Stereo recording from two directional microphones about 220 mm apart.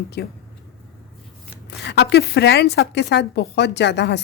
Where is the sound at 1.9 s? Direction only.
50° left (ahead or behind).